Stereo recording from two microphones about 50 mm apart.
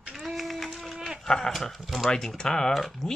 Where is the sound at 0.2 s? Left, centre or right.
Centre.